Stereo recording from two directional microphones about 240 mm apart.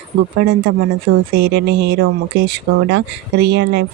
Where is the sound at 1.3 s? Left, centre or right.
Right.